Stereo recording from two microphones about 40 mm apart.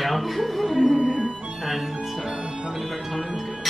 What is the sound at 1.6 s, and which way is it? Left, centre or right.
Music, centre.